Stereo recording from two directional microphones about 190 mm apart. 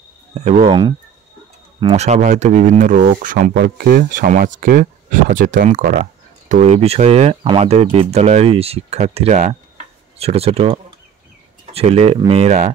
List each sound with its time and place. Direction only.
0.3 s speech: 35° right (ahead or behind)
2.0 s speech: 35° right (ahead or behind)